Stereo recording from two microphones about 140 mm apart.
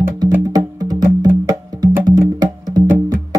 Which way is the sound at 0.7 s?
25° right (ahead or behind).